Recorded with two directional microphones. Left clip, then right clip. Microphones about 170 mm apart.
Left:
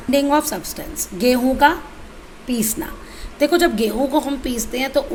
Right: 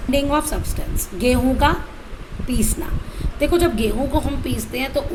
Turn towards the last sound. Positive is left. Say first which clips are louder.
# left 3 dB
turn(degrees=35)  # may be behind; listen again after turning